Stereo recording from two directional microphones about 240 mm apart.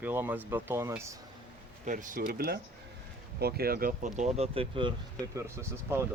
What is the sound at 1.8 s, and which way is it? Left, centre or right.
Speech, right.